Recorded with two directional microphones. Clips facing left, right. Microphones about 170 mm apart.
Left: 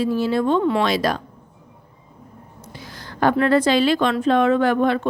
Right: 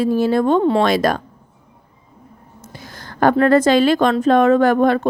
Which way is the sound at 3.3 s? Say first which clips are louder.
Right 4 dB; 45° right (ahead or behind).